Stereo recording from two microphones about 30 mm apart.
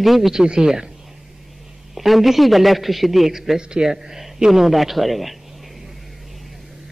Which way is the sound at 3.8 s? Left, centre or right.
Centre.